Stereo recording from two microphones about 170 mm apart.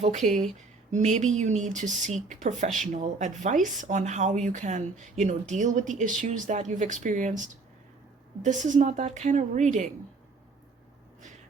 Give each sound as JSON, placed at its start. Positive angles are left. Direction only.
{"t": 0.9, "sound": "speech", "side_deg": -45}